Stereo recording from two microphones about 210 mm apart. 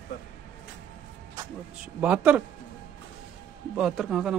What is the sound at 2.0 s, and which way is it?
Speech, 5° right (ahead or behind).